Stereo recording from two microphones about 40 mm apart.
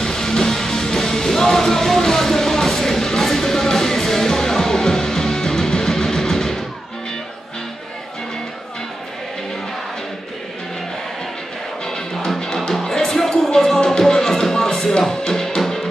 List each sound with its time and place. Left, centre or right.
0.0 s music: centre
11.8 s music: centre